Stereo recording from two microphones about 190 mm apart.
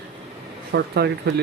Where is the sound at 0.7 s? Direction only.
60° right (ahead or behind).